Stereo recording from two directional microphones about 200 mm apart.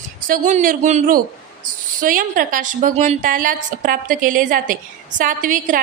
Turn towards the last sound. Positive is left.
turn(degrees=-40)  # may be behind; listen again after turning